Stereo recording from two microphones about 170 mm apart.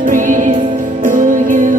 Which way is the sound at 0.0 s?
50° right (ahead or behind).